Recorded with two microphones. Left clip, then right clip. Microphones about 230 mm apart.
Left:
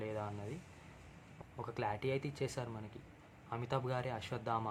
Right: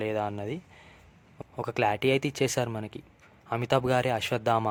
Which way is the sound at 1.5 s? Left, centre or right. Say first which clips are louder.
Right 13 dB; right.